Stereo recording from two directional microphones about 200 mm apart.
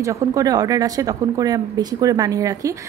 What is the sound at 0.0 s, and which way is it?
A woman's voice, 15° right (ahead or behind).